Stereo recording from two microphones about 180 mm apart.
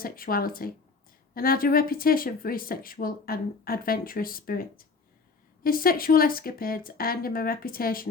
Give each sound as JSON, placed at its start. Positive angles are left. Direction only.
{"t": 0.0, "sound": "a woman's voice", "side_deg": 55}